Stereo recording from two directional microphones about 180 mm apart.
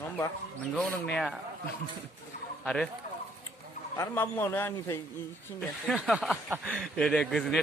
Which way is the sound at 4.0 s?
15° left (ahead or behind).